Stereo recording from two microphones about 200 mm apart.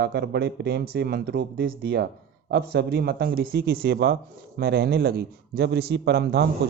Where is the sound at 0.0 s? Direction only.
55° right (ahead or behind).